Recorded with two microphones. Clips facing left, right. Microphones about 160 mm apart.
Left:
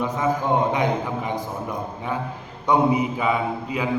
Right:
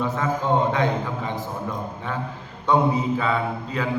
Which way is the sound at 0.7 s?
15° left (ahead or behind).